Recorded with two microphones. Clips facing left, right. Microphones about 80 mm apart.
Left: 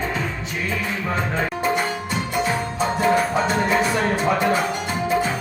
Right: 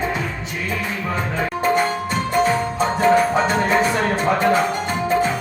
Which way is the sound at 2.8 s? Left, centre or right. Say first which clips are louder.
Right 2 dB; right.